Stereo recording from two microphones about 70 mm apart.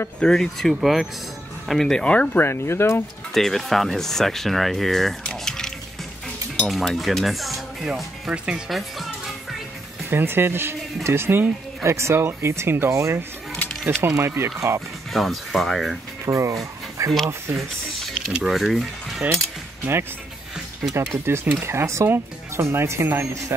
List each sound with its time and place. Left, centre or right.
0.2 s speech: centre
2.3 s speech: left
3.3 s speech: centre
6.7 s speech: centre
8.6 s speech: centre
10.0 s speech: right
15.1 s speech: centre
16.3 s speech: right
17.0 s a sound: right
18.4 s speech: centre
19.8 s speech: right